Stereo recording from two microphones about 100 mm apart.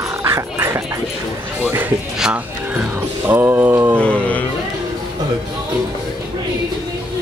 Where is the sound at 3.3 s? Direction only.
20° right (ahead or behind).